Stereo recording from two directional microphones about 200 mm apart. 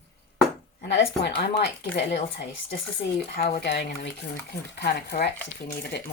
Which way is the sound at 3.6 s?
55° left (ahead or behind).